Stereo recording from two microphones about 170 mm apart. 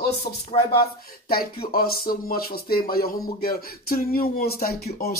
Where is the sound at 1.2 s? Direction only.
60° left (ahead or behind).